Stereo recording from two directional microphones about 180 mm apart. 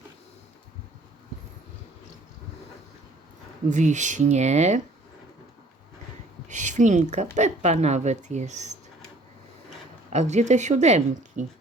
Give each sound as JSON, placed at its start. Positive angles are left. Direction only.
{"t": 3.7, "sound": "speech", "side_deg": -40}
{"t": 6.5, "sound": "a sound", "side_deg": -45}
{"t": 7.3, "sound": "speech", "side_deg": -40}
{"t": 10.1, "sound": "speech", "side_deg": -40}